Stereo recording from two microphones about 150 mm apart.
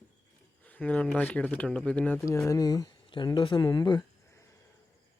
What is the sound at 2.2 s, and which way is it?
Speech, 20° left (ahead or behind).